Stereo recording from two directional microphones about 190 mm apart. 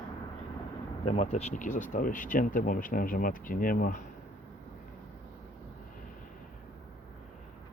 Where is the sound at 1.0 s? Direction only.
35° left (ahead or behind).